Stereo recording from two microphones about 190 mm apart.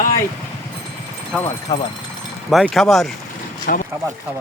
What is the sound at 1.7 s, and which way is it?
Speech, 20° left (ahead or behind).